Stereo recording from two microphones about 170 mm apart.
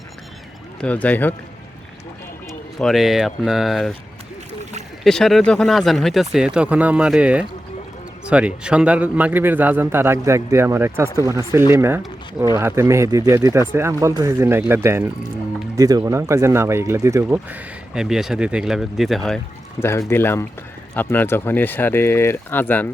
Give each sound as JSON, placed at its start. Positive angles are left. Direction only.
{"t": 0.8, "sound": "speech", "side_deg": 10}
{"t": 2.7, "sound": "speech", "side_deg": 0}
{"t": 5.0, "sound": "speech", "side_deg": 0}
{"t": 19.8, "sound": "speech", "side_deg": 15}